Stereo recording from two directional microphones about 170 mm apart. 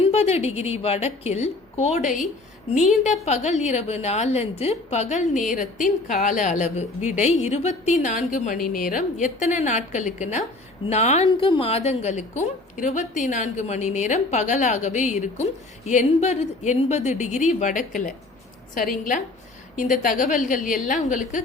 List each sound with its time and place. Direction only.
0.1 s a woman's voice: 40° left (ahead or behind)
19.7 s a woman's voice: 45° left (ahead or behind)